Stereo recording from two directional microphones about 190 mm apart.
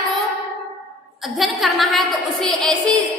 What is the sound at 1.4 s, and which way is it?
A woman's voice, centre (ahead or behind).